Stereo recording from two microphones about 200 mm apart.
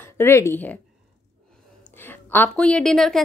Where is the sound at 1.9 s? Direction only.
10° left (ahead or behind).